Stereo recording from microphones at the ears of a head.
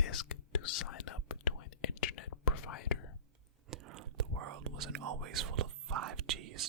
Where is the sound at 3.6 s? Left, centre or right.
Right.